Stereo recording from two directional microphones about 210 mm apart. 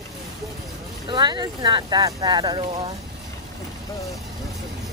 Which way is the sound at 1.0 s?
20° right (ahead or behind).